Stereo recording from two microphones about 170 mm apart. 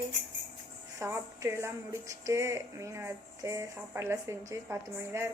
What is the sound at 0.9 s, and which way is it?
Speech, 15° right (ahead or behind).